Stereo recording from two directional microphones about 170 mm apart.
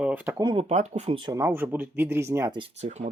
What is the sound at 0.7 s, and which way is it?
Speech, 40° right (ahead or behind).